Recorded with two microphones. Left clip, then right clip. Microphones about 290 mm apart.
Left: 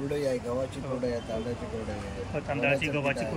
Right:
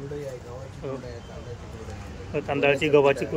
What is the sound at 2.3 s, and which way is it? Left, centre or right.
Speech, centre.